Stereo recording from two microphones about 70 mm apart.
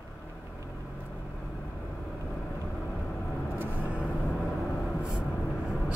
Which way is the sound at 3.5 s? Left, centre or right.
Right.